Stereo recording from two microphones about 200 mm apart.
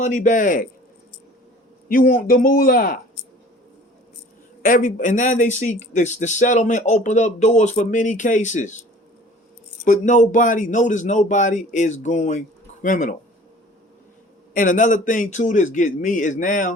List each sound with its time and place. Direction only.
0.0 s a man's voice: 40° left (ahead or behind)
1.9 s a man's voice: 45° left (ahead or behind)
4.6 s a man's voice: 40° left (ahead or behind)
9.8 s a man's voice: 40° left (ahead or behind)
14.5 s a man's voice: 40° left (ahead or behind)